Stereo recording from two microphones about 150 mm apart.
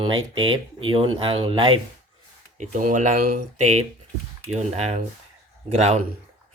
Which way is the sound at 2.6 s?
60° right (ahead or behind).